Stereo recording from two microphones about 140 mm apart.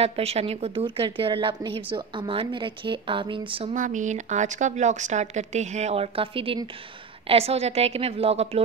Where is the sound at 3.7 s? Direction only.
65° right (ahead or behind).